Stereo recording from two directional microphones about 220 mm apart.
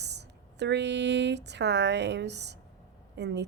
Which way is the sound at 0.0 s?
50° right (ahead or behind).